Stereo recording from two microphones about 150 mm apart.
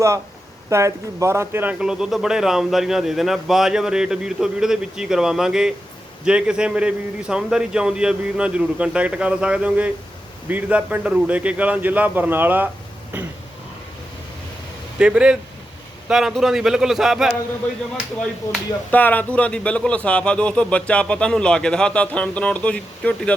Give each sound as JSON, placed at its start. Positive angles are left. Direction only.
{"t": 0.7, "sound": "a man's voice", "side_deg": -20}
{"t": 1.8, "sound": "a man's voice", "side_deg": -5}
{"t": 14.9, "sound": "a man's voice", "side_deg": -5}